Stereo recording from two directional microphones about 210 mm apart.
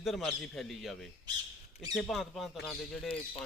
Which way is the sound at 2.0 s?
Centre (ahead or behind).